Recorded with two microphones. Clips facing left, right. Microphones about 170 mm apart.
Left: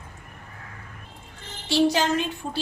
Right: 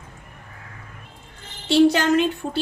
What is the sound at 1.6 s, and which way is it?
Speech, 60° right (ahead or behind).